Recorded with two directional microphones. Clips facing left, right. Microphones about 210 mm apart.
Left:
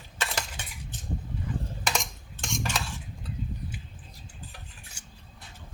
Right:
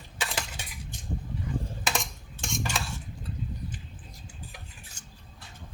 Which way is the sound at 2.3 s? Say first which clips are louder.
Even; 10° right (ahead or behind).